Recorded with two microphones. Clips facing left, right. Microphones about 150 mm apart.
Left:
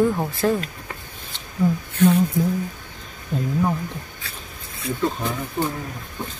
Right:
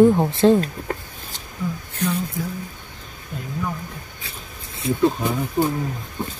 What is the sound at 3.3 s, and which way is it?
Speech, 30° left (ahead or behind).